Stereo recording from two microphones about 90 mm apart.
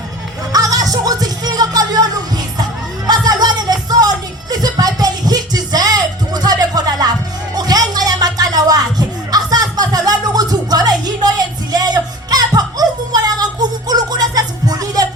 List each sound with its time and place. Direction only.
0.5 s music: 45° right (ahead or behind)
3.1 s music: 50° right (ahead or behind)